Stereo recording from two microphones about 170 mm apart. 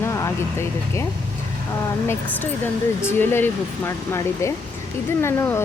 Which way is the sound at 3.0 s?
15° left (ahead or behind).